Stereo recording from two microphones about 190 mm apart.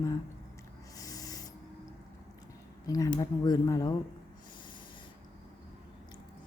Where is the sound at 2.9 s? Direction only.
20° left (ahead or behind).